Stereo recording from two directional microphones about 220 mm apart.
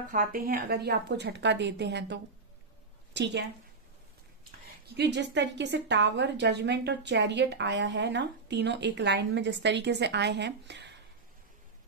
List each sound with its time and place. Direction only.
0.1 s a woman's voice: 40° right (ahead or behind)
4.8 s a woman's voice: 50° right (ahead or behind)